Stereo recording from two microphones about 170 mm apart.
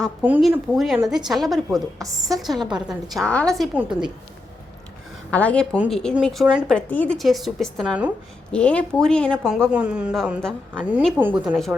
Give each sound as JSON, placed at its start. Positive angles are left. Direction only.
{"t": 0.2, "sound": "speech", "side_deg": -10}
{"t": 1.7, "sound": "a woman's voice", "side_deg": -20}
{"t": 2.3, "sound": "speech", "side_deg": 0}
{"t": 5.3, "sound": "speech", "side_deg": 10}
{"t": 5.7, "sound": "speech", "side_deg": -5}
{"t": 6.7, "sound": "speech", "side_deg": 10}